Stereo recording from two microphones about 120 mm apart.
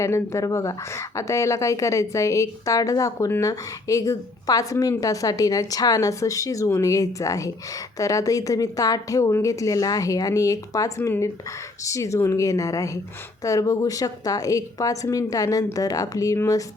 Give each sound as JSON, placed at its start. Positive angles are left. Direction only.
{"t": 0.0, "sound": "speech", "side_deg": 25}